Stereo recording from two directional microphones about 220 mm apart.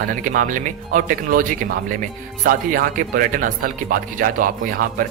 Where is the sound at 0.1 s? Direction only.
40° right (ahead or behind).